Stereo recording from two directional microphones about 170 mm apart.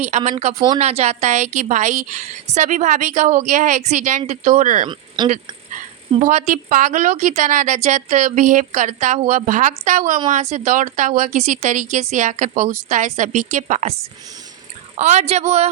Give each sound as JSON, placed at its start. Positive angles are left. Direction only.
{"t": 0.3, "sound": "a woman's voice", "side_deg": -40}
{"t": 4.9, "sound": "speech", "side_deg": -25}
{"t": 6.2, "sound": "a woman's voice", "side_deg": -45}